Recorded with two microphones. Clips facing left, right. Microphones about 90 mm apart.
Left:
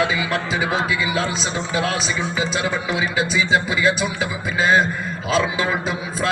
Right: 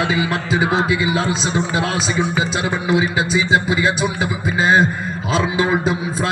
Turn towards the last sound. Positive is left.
turn(degrees=-40)  # may be behind; listen again after turning